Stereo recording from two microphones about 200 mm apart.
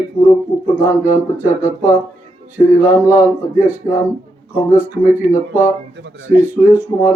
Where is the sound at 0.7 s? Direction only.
10° right (ahead or behind).